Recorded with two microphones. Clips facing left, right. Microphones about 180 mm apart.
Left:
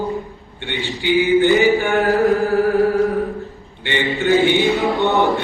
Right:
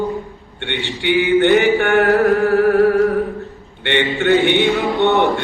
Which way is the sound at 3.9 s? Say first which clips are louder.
Right 2 dB; 65° right (ahead or behind).